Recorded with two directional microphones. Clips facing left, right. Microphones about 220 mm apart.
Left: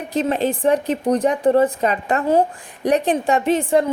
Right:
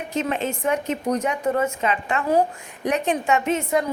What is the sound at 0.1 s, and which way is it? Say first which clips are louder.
Speech: left 6 dB; 35° left (ahead or behind).